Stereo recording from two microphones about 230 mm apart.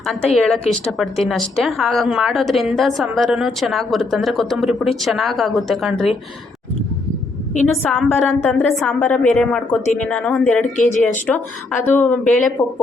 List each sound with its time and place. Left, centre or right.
0.3 s a woman's voice: centre
7.6 s a woman's voice: centre
10.8 s speech: left
11.3 s speech: centre